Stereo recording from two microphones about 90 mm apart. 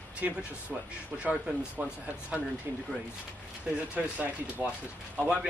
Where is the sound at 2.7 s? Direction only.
25° right (ahead or behind).